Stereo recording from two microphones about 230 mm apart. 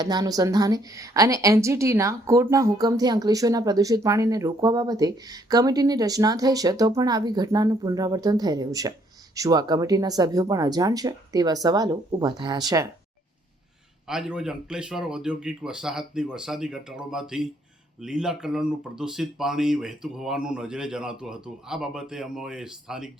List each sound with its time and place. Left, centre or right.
0.0 s a woman's voice: centre
14.1 s speech: centre